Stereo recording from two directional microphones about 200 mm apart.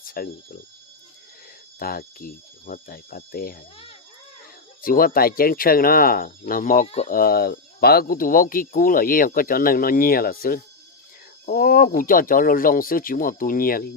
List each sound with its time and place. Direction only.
0.0 s speech: 45° left (ahead or behind)
1.8 s speech: 45° left (ahead or behind)
4.8 s speech: 45° left (ahead or behind)
6.8 s speech: 30° left (ahead or behind)
7.1 s speech: 50° left (ahead or behind)